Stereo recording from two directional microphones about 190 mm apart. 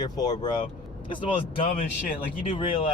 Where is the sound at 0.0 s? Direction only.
20° left (ahead or behind).